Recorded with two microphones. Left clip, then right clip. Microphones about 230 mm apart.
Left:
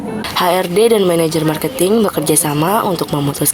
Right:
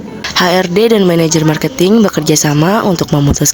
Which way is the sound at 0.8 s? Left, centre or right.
Right.